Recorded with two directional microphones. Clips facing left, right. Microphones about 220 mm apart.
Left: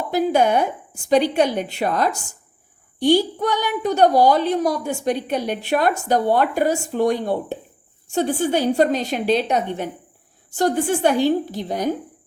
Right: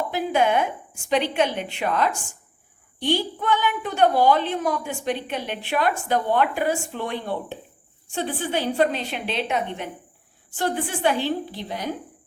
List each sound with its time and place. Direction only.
0.1 s a woman's voice: 40° left (ahead or behind)